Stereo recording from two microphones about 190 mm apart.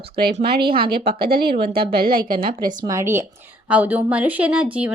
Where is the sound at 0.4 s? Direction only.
55° right (ahead or behind).